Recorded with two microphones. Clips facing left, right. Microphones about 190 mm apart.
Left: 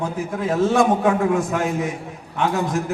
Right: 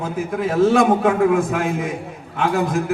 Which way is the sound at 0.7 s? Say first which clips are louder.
Right 2 dB; 55° right (ahead or behind).